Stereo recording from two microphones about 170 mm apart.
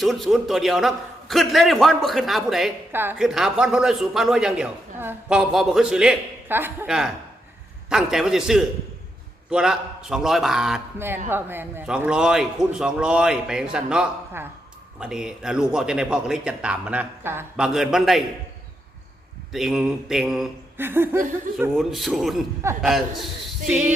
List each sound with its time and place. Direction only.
0.0 s a man's voice: centre (ahead or behind)
2.9 s a man's voice: 10° right (ahead or behind)
19.5 s a man's voice: 5° right (ahead or behind)
20.7 s speech: 15° right (ahead or behind)
21.8 s a man's voice: centre (ahead or behind)